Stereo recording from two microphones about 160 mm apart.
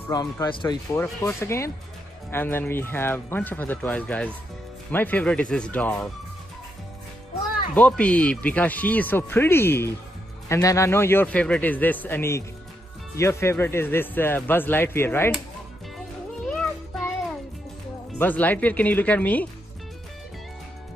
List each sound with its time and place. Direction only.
0.1 s speech: 25° left (ahead or behind)
0.9 s speech: 15° left (ahead or behind)
7.7 s speech: 10° left (ahead or behind)
16.5 s a sound: 5° left (ahead or behind)
18.1 s speech: 10° left (ahead or behind)